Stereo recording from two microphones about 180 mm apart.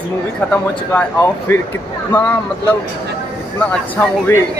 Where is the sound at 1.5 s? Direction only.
15° left (ahead or behind).